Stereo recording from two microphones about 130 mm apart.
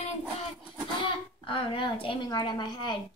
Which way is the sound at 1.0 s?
40° left (ahead or behind).